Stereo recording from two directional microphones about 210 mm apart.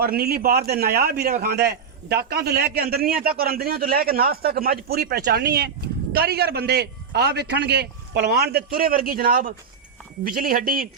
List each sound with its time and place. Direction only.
0.0 s a man's voice: 45° right (ahead or behind)